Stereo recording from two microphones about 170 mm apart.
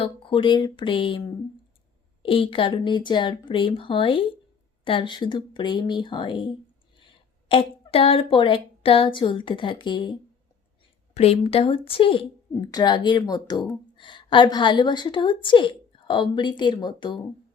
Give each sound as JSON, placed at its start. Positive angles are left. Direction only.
{"t": 0.0, "sound": "a woman's voice", "side_deg": 30}
{"t": 2.2, "sound": "a woman's voice", "side_deg": 30}